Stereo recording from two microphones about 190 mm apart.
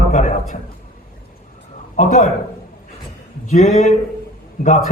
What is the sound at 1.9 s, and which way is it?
Speech, 40° left (ahead or behind).